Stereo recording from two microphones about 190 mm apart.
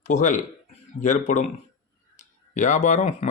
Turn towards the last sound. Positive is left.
turn(degrees=35)  # may be behind; listen again after turning